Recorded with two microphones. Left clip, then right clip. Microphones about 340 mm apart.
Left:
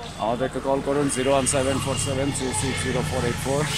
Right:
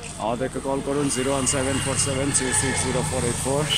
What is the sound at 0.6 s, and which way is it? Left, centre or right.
Speech, centre.